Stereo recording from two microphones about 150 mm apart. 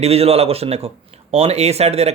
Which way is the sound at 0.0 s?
40° right (ahead or behind).